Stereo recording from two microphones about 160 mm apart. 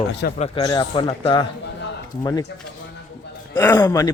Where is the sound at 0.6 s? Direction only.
25° left (ahead or behind).